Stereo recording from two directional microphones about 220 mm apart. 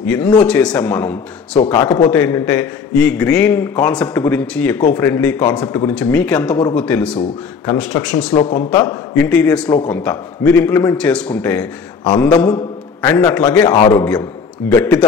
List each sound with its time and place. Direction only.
0.0 s a man's voice: 5° left (ahead or behind)
1.7 s a man's voice: 20° left (ahead or behind)
2.0 s a man's voice: 5° left (ahead or behind)
12.5 s a sound: 15° left (ahead or behind)
13.3 s a man's voice: 5° left (ahead or behind)
13.6 s a man's voice: 20° left (ahead or behind)
14.7 s a man's voice: 5° left (ahead or behind)